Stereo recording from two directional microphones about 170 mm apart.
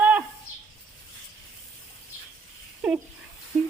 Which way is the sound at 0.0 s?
10° right (ahead or behind).